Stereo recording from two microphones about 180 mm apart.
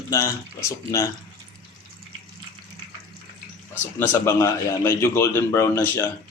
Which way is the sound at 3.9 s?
15° left (ahead or behind).